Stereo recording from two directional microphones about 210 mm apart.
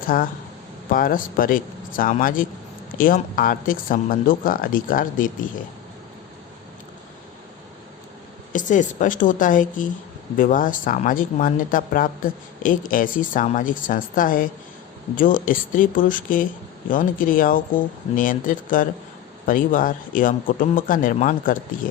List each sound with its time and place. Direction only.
0.1 s speech: 40° left (ahead or behind)
8.5 s speech: 35° left (ahead or behind)